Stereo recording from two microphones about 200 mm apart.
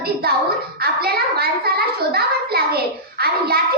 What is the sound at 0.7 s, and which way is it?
Hands, 50° right (ahead or behind).